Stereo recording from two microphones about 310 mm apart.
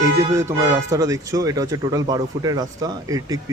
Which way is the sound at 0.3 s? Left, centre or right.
Centre.